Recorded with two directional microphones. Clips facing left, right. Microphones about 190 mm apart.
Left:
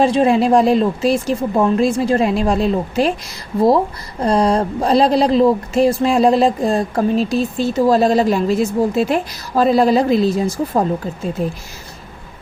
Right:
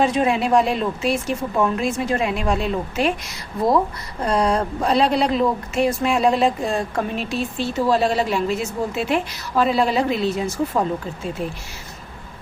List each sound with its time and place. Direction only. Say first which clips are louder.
0.0 s speech: left 5 dB; 35° left (ahead or behind)
4.2 s speech: left 5 dB; 30° left (ahead or behind)